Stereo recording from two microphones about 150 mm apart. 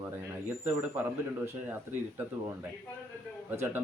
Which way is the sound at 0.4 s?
10° right (ahead or behind).